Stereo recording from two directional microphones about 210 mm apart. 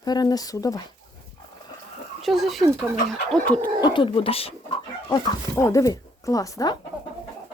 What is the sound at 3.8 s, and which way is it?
Speech, 25° left (ahead or behind).